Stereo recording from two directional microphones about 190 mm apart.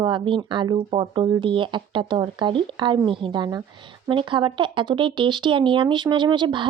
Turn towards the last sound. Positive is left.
turn(degrees=-25)  # may be behind; listen again after turning